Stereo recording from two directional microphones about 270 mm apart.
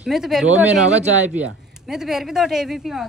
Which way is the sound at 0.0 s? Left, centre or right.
Centre.